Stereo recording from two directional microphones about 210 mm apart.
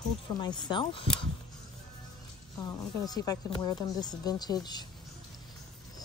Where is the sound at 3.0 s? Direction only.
15° left (ahead or behind).